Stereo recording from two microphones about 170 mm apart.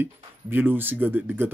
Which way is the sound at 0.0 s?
10° right (ahead or behind).